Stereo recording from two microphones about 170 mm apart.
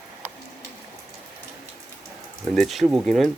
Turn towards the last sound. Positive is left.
turn(degrees=0)  # may be behind; listen again after turning